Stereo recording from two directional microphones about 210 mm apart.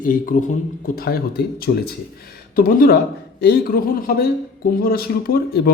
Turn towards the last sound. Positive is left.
turn(degrees=45)  # may be behind; listen again after turning